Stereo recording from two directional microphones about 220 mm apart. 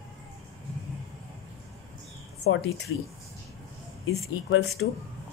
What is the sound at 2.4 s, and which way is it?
Speech, 65° left (ahead or behind).